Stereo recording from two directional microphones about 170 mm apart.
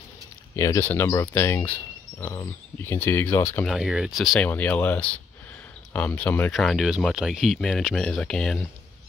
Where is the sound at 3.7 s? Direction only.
5° right (ahead or behind).